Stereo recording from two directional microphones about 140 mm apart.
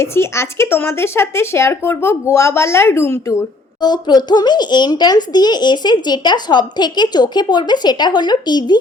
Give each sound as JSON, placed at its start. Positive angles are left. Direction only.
{"t": 0.0, "sound": "speech", "side_deg": 20}